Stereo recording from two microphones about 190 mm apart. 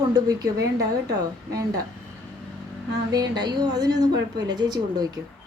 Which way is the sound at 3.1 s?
20° right (ahead or behind).